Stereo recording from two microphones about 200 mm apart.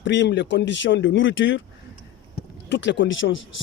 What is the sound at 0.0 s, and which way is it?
Speech, 60° left (ahead or behind).